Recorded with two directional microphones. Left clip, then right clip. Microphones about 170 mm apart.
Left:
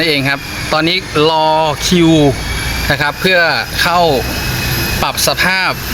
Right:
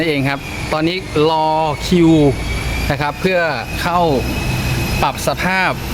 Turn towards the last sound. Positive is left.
turn(degrees=-15)  # may be behind; listen again after turning